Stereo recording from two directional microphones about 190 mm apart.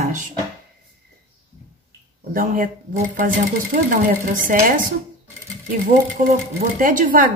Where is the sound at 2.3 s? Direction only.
45° right (ahead or behind).